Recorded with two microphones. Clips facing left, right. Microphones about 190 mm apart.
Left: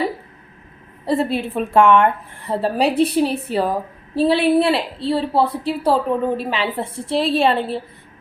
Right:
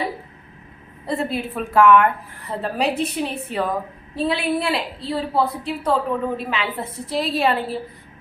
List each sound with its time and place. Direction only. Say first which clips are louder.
1.0 s a woman's voice: left 5 dB; 30° left (ahead or behind)